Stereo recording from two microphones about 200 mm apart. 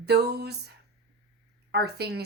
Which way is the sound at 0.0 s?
55° right (ahead or behind).